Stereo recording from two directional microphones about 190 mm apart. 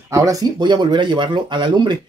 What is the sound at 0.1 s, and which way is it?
Speech, 15° right (ahead or behind).